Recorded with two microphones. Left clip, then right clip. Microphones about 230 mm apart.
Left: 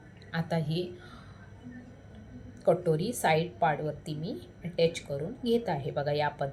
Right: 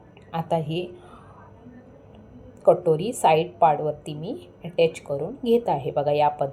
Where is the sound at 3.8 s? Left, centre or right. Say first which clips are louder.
Right 8 dB; right.